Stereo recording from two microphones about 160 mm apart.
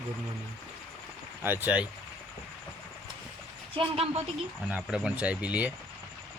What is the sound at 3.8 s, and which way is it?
Speech, 40° right (ahead or behind).